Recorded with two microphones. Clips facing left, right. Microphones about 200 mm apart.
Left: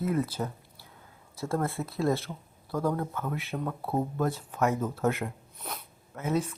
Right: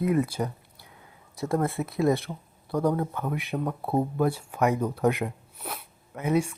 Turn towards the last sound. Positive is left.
turn(degrees=-15)  # may be behind; listen again after turning